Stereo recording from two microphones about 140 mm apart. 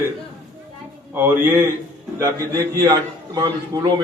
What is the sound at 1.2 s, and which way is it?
A man's voice, 15° right (ahead or behind).